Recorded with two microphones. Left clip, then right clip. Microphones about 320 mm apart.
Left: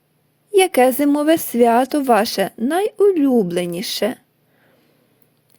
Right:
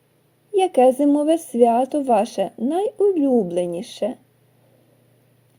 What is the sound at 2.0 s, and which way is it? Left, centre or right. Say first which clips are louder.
Speech: left 3 dB; left.